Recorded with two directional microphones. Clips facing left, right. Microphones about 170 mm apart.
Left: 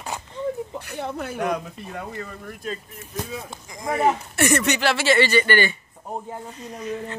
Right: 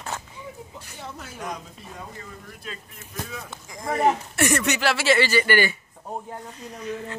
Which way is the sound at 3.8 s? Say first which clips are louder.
Left 1 dB; 5° left (ahead or behind).